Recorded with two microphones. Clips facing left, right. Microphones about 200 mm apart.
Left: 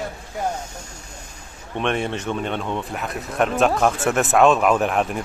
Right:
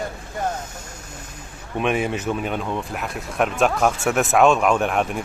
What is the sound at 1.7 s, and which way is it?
Speech, 5° right (ahead or behind).